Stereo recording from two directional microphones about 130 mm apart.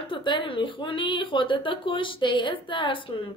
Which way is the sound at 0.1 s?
40° left (ahead or behind).